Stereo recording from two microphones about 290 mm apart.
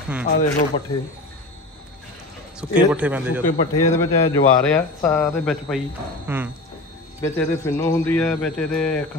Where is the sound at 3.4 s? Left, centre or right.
Left.